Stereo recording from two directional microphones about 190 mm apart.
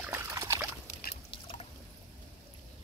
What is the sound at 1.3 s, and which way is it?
Liquid, 25° left (ahead or behind).